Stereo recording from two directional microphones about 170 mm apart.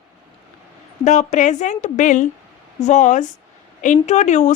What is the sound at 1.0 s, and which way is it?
A woman's voice, 45° left (ahead or behind).